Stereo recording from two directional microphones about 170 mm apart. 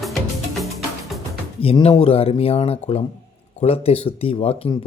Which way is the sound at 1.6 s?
35° left (ahead or behind).